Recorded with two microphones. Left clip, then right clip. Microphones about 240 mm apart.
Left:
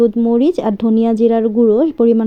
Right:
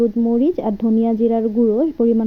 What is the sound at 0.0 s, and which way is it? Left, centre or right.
Speech, left.